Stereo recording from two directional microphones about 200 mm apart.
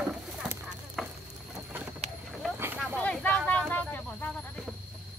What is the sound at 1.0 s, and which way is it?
Stir, centre (ahead or behind).